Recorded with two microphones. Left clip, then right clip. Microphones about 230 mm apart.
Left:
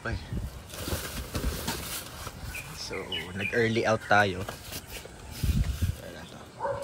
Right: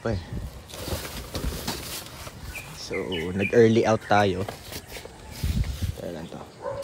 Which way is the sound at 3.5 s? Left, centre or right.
Right.